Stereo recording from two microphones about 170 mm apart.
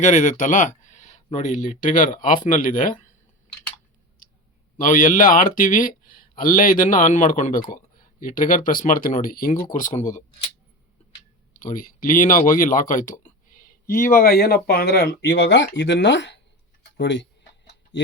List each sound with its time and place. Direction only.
0.0 s speech: 45° left (ahead or behind)
4.8 s speech: 50° left (ahead or behind)
9.7 s speech: 45° left (ahead or behind)
11.5 s speech: 50° left (ahead or behind); by 17.2 s 90° left